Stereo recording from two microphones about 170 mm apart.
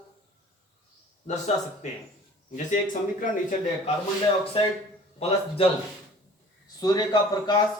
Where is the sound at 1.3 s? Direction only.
45° left (ahead or behind).